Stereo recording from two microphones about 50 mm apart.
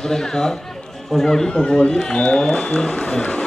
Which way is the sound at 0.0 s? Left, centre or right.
Centre.